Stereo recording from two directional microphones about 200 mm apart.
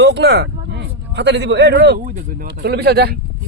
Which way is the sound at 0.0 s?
55° right (ahead or behind).